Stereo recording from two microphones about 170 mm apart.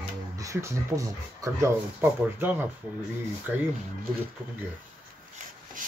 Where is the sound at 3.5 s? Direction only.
5° right (ahead or behind).